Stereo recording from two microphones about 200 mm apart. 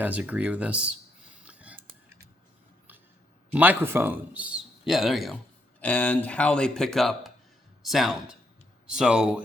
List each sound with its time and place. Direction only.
0.0 s speech: 5° right (ahead or behind)
1.5 s a sound: 5° right (ahead or behind)
3.5 s a man's voice: 10° right (ahead or behind)